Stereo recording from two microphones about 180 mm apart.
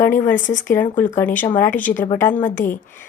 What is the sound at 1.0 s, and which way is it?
Speech, 45° left (ahead or behind).